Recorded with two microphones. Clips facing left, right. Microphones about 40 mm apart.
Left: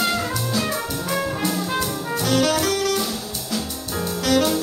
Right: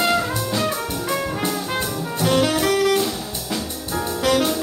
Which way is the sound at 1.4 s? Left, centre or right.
Centre.